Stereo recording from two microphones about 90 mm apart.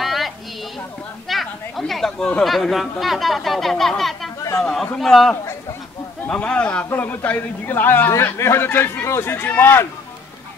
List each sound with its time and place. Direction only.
0.0 s a sound: centre (ahead or behind)
1.3 s speech: centre (ahead or behind)
4.4 s chatter: 35° left (ahead or behind)
5.0 s a man's voice: 5° left (ahead or behind); by 9.8 s 25° left (ahead or behind)